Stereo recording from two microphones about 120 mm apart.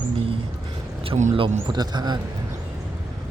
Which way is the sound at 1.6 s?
35° right (ahead or behind).